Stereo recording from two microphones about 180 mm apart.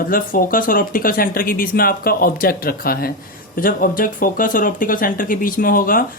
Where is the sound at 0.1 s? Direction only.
50° left (ahead or behind).